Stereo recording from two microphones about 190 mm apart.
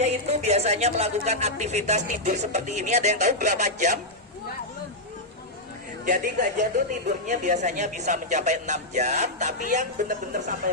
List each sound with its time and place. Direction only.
0.0 s a woman's voice: 35° right (ahead or behind)
6.1 s a woman's voice: 45° right (ahead or behind)